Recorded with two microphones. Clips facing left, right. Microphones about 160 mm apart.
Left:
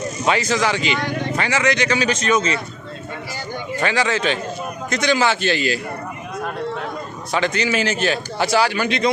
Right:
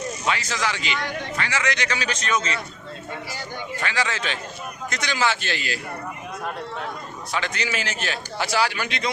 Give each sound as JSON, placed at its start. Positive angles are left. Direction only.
{"t": 0.3, "sound": "a man's voice", "side_deg": 20}
{"t": 3.8, "sound": "a man's voice", "side_deg": 25}
{"t": 7.3, "sound": "a man's voice", "side_deg": 25}